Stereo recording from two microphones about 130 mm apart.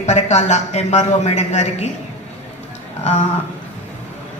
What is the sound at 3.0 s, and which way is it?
Speech, 60° left (ahead or behind).